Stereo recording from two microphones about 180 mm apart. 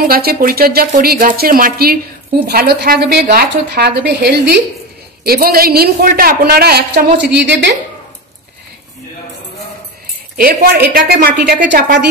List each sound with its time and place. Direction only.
0.0 s a man's voice: 55° right (ahead or behind); by 7.7 s 80° right
10.3 s a man's voice: 55° right (ahead or behind)